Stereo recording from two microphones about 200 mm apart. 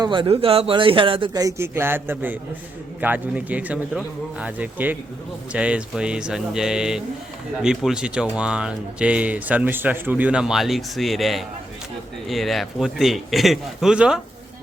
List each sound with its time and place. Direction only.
0.0 s a man's voice: 25° right (ahead or behind); by 14.2 s 5° right (ahead or behind)